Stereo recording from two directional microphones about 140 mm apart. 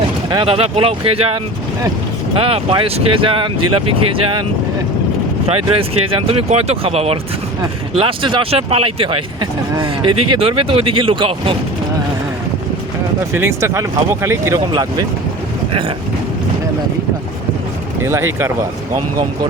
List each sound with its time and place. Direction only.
0.3 s speech: 35° right (ahead or behind)
2.3 s speech: 40° right (ahead or behind)
5.5 s speech: 40° right (ahead or behind)
13.3 s speech: 20° right (ahead or behind)
14.7 s speech: 30° right (ahead or behind)
18.0 s speech: 15° right (ahead or behind)